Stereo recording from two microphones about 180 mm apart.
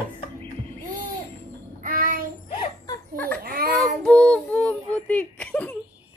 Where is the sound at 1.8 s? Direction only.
50° right (ahead or behind).